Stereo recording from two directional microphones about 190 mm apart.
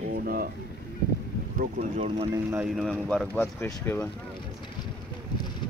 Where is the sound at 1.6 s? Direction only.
40° right (ahead or behind).